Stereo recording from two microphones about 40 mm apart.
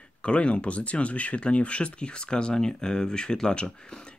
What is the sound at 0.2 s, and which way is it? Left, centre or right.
Speech, left.